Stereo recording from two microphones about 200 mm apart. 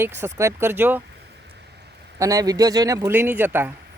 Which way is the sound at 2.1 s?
15° right (ahead or behind).